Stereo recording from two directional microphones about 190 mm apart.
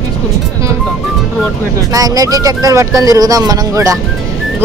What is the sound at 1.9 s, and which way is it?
Speech, 20° right (ahead or behind).